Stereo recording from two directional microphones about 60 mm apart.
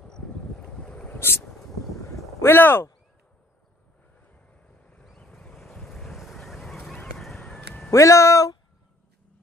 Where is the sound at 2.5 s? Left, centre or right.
Left.